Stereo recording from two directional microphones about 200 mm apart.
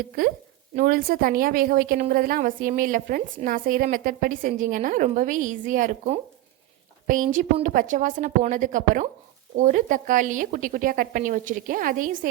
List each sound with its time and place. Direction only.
0.2 s a woman's voice: 45° right (ahead or behind)